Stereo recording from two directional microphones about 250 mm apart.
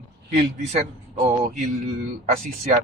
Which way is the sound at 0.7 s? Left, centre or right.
Right.